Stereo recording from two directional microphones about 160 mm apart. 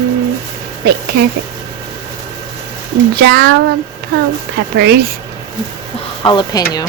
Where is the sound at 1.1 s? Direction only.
75° right (ahead or behind).